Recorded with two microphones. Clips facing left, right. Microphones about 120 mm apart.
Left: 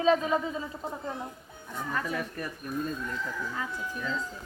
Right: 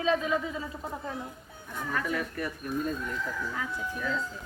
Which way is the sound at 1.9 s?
30° left (ahead or behind).